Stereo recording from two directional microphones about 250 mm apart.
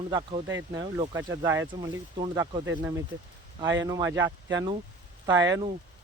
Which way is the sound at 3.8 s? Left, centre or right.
Centre.